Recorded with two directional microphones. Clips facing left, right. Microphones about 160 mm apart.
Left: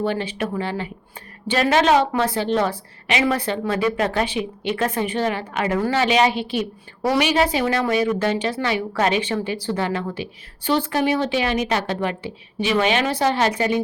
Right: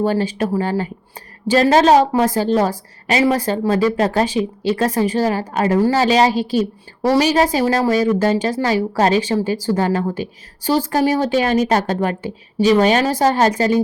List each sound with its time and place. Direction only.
0.0 s a woman's voice: 40° right (ahead or behind)